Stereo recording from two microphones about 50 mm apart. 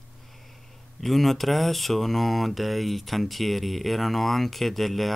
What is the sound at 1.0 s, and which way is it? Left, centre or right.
Speech, centre.